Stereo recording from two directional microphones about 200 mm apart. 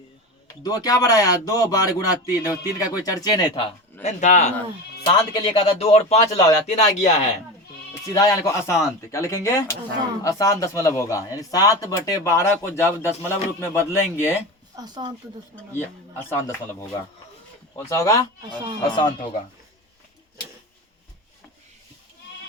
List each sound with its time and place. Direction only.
0.6 s speech: 20° left (ahead or behind)
4.0 s speech: 35° left (ahead or behind)
5.0 s speech: 25° left (ahead or behind)
8.1 s speech: 15° left (ahead or behind)
14.8 s speech: 20° right (ahead or behind)
15.8 s speech: 10° left (ahead or behind)
17.7 s speech: 15° left (ahead or behind)